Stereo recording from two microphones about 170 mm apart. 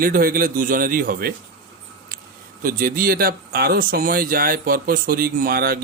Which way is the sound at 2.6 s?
55° right (ahead or behind).